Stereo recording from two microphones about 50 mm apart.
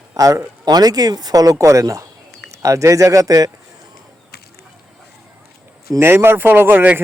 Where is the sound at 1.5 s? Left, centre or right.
Right.